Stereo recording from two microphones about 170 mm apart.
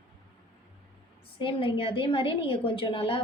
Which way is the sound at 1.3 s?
30° left (ahead or behind).